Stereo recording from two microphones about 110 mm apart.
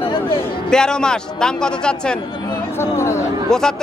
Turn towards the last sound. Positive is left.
turn(degrees=5)  # may be behind; listen again after turning